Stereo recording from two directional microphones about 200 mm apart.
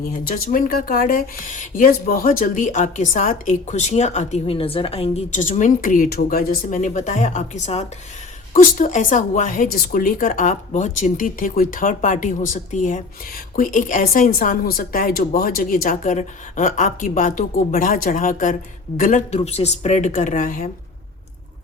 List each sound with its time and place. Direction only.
0.0 s speech: 45° left (ahead or behind)